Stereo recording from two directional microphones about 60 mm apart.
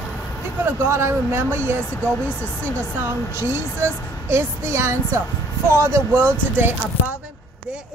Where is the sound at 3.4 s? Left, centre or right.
Right.